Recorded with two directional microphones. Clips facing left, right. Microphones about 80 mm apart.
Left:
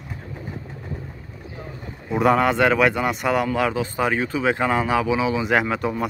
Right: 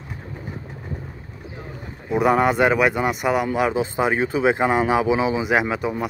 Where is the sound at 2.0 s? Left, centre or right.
Centre.